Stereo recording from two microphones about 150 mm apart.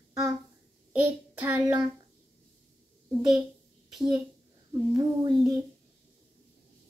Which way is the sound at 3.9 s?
Centre (ahead or behind).